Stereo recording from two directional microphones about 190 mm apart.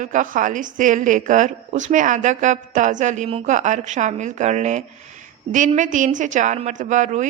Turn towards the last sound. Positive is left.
turn(degrees=-40)  # may be behind; listen again after turning